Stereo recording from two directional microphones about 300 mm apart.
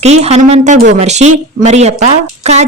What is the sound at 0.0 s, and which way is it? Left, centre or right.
Speech, right.